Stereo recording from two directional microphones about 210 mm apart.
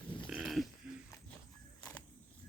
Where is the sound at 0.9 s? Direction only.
5° right (ahead or behind).